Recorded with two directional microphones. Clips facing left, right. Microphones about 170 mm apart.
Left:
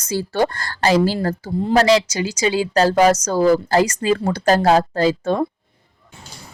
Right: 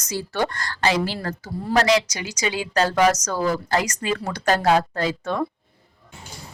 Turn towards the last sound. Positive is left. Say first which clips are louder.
# left 6 dB
turn(degrees=30)  # may be behind; listen again after turning